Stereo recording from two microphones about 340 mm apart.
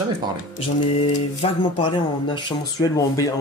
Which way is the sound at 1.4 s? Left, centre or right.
Centre.